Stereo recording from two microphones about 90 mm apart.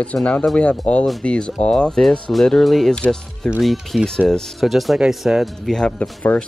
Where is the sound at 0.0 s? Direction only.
15° left (ahead or behind).